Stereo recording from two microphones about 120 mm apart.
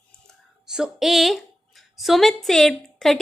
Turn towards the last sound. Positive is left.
turn(degrees=0)  # may be behind; listen again after turning